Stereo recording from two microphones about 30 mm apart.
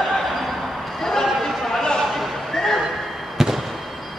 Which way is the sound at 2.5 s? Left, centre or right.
Centre.